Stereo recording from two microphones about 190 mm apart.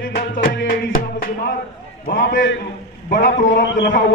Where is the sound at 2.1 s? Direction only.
75° left (ahead or behind).